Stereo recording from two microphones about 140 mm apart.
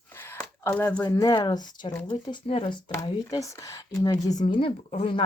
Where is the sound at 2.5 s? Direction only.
45° left (ahead or behind).